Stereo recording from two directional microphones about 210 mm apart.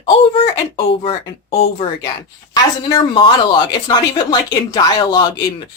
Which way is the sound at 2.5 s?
20° left (ahead or behind).